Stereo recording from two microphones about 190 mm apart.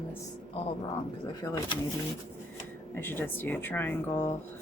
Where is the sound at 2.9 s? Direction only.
10° left (ahead or behind).